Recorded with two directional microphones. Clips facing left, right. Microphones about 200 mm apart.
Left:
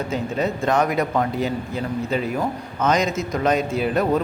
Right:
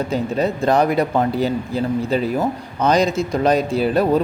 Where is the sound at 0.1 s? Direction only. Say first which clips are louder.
Right 3 dB; 35° right (ahead or behind).